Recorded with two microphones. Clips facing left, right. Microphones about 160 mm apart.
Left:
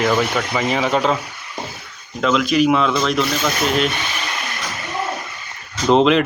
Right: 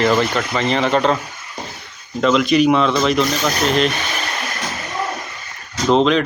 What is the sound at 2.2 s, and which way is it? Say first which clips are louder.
Speech: right 2 dB; centre (ahead or behind).